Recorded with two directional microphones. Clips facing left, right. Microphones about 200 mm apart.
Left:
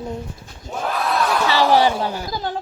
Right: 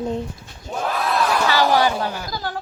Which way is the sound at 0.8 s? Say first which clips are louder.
Even; centre (ahead or behind).